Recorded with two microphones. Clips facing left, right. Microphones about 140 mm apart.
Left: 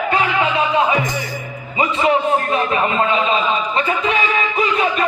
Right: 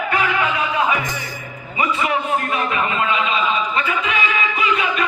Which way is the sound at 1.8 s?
30° left (ahead or behind).